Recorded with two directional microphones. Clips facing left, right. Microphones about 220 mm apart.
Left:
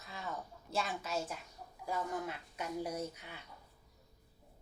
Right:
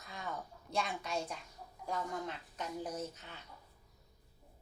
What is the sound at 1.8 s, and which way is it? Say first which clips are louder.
Speech: left 1 dB; 5° left (ahead or behind).